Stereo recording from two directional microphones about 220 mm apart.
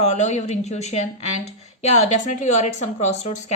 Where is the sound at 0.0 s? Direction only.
30° left (ahead or behind).